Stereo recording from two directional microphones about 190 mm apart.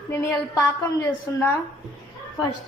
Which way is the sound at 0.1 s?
15° left (ahead or behind).